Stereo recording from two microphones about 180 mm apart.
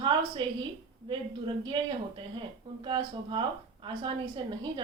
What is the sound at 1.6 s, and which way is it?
A woman's voice, 25° right (ahead or behind).